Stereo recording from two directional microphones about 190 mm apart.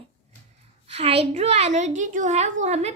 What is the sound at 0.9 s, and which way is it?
A child's voice, 30° right (ahead or behind).